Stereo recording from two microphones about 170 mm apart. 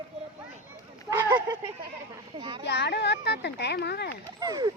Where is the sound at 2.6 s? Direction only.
85° left.